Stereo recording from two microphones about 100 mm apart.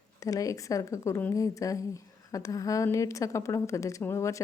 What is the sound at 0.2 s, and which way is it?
A woman's voice, 35° left (ahead or behind).